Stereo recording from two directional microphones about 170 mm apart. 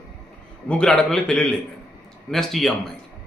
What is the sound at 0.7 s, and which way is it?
A man's voice, 5° left (ahead or behind).